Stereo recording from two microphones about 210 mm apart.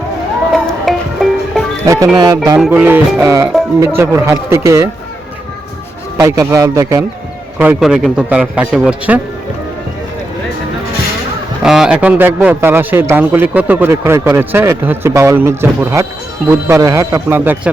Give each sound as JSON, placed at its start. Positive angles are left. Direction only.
{"t": 0.5, "sound": "music", "side_deg": 0}
{"t": 2.1, "sound": "a man's voice", "side_deg": -15}
{"t": 6.1, "sound": "a man's voice", "side_deg": -15}
{"t": 11.6, "sound": "a man's voice", "side_deg": -5}